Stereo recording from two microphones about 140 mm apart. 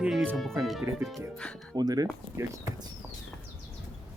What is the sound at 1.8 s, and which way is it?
Speech, 25° right (ahead or behind).